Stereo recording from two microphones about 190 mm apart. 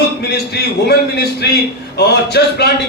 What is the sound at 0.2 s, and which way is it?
A man's voice, 60° left (ahead or behind).